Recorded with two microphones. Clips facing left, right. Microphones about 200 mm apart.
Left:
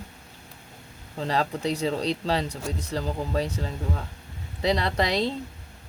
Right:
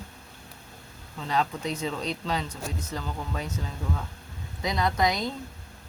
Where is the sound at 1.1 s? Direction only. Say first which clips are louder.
Left 2 dB; 35° left (ahead or behind).